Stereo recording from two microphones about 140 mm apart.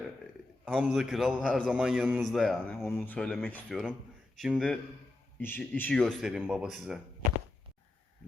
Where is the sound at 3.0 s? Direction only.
10° left (ahead or behind).